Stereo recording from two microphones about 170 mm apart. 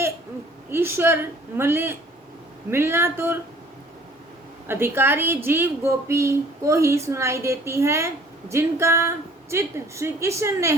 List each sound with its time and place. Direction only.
0.7 s a woman's voice: 15° right (ahead or behind)
4.7 s a woman's voice: 15° right (ahead or behind)